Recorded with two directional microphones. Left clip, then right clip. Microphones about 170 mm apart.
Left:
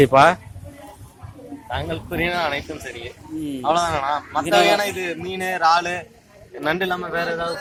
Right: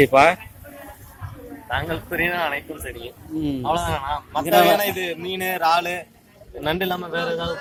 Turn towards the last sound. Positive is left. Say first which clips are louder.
# left 1 dB
turn(degrees=-5)  # may be behind; listen again after turning